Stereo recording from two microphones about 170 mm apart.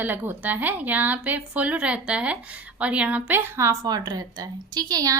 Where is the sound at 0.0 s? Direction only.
10° right (ahead or behind).